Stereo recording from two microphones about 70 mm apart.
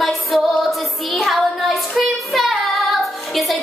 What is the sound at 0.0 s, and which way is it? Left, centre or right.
Music, centre.